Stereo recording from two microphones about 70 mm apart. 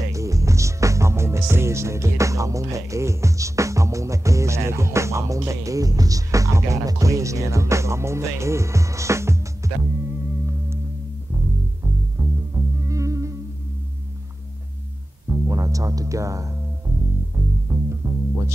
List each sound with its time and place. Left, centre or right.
0.1 s speech: right
12.2 s music: right
15.4 s music: right
17.7 s music: right